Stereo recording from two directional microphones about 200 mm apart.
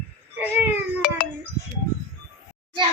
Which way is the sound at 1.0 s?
45° left (ahead or behind).